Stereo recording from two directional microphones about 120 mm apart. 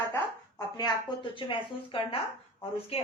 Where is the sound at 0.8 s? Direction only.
45° left (ahead or behind).